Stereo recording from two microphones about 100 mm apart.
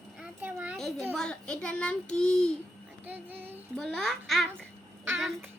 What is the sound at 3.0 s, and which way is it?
Child singing, 20° right (ahead or behind).